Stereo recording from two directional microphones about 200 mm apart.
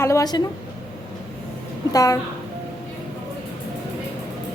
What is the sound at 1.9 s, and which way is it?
Speech, 15° left (ahead or behind).